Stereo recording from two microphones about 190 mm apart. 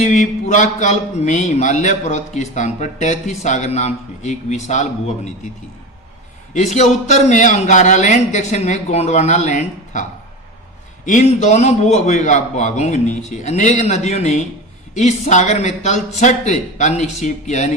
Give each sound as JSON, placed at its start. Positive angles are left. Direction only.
{"t": 0.0, "sound": "a man's voice", "side_deg": 40}
{"t": 6.5, "sound": "a man's voice", "side_deg": 35}